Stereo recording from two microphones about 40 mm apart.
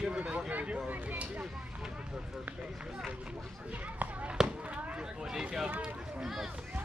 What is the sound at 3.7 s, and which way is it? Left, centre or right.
Speech, right.